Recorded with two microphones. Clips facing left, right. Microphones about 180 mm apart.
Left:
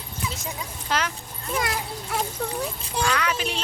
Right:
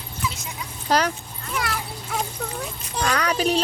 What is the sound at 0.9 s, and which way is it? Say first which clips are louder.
Speech: right 6 dB; 40° right (ahead or behind).